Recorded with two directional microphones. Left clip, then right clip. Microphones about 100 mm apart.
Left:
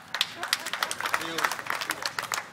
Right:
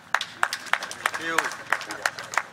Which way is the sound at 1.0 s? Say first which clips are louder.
Right 4 dB; 30° right (ahead or behind).